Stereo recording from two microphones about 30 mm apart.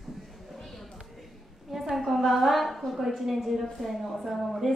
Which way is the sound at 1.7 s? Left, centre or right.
Centre.